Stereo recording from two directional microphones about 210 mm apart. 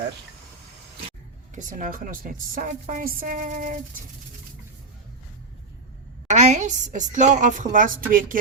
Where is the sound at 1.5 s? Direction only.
40° right (ahead or behind).